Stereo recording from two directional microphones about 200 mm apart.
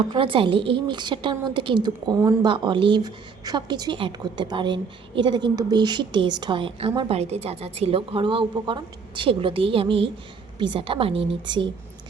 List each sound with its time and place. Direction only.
0.1 s a woman's voice: 25° right (ahead or behind)